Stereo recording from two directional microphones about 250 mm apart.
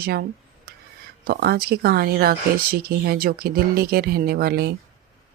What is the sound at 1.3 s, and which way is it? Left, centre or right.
Speech, right.